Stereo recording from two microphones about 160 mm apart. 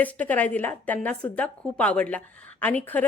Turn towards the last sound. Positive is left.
turn(degrees=10)  # may be behind; listen again after turning